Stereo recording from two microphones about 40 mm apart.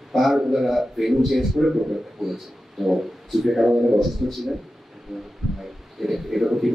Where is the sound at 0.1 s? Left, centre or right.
Centre.